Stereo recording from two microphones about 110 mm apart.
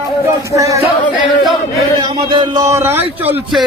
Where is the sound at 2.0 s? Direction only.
45° right (ahead or behind).